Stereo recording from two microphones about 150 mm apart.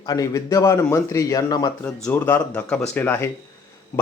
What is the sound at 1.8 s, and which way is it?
Speech, 15° left (ahead or behind).